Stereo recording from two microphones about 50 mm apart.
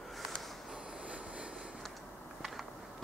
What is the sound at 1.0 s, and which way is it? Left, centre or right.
Vehicle, right.